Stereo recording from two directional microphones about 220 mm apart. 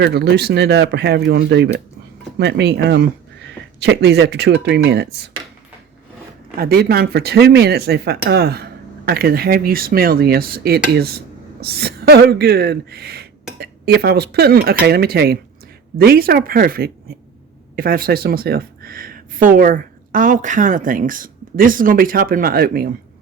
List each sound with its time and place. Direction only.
0.0 s speech: 50° right (ahead or behind)
6.6 s speech: 45° right (ahead or behind)